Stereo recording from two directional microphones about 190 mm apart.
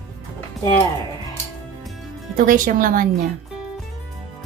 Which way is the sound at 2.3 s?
45° right (ahead or behind).